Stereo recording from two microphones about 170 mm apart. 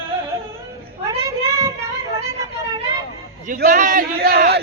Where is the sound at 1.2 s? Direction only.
15° right (ahead or behind).